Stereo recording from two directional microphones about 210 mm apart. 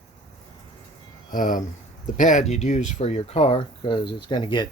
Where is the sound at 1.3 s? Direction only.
40° left (ahead or behind); by 4.6 s 20° left (ahead or behind).